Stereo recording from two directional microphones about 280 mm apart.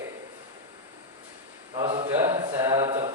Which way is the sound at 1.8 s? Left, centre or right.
Centre.